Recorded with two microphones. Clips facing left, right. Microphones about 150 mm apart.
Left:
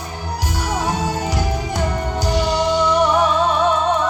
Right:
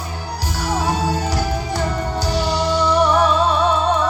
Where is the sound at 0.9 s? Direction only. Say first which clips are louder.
Right 1 dB; 20° left (ahead or behind).